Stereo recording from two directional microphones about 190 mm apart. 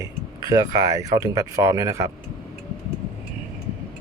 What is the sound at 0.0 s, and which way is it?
Speech, 20° right (ahead or behind).